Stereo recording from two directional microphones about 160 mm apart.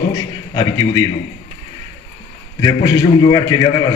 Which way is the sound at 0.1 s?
20° left (ahead or behind).